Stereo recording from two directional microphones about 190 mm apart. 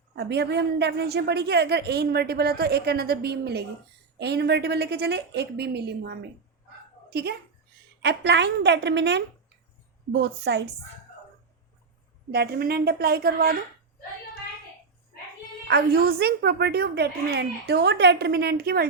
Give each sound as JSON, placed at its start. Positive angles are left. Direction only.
{"t": 0.2, "sound": "a woman's voice", "side_deg": -60}
{"t": 12.3, "sound": "a woman's voice", "side_deg": -55}
{"t": 15.6, "sound": "a woman's voice", "side_deg": -55}